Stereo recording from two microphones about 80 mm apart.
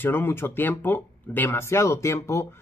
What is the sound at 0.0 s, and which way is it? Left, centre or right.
Speech, left.